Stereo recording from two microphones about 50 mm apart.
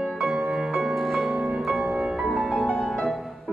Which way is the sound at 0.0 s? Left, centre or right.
Centre.